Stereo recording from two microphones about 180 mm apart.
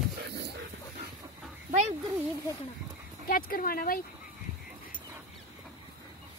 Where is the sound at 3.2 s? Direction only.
55° left (ahead or behind).